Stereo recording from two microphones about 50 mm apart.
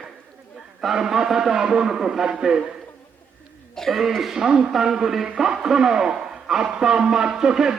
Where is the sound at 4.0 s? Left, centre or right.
Centre.